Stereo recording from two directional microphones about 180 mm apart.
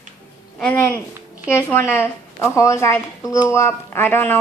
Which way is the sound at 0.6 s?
15° left (ahead or behind).